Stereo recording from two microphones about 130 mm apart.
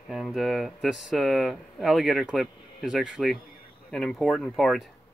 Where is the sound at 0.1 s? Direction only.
Centre (ahead or behind).